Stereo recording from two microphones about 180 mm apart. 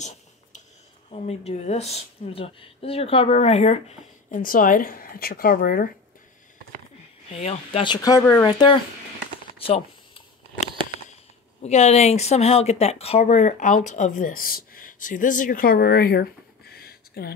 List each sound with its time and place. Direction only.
0.0 s a sound: 40° left (ahead or behind)
1.1 s a woman's voice: 35° left (ahead or behind)
4.3 s speech: 50° left (ahead or behind)
7.2 s a woman's voice: 35° left (ahead or behind)
7.8 s speech: 25° left (ahead or behind)
8.2 s speech: 10° left (ahead or behind)
8.5 s speech: 25° left (ahead or behind)
11.6 s speech: 40° left (ahead or behind); by 17.3 s 60° left (ahead or behind)